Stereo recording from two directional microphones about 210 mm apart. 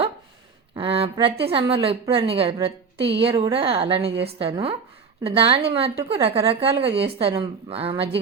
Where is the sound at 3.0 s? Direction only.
55° right (ahead or behind).